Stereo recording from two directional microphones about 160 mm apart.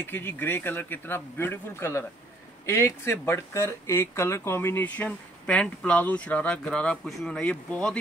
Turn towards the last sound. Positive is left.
turn(degrees=5)  # may be behind; listen again after turning